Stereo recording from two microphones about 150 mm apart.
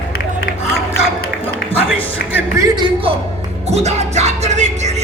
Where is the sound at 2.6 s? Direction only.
30° right (ahead or behind).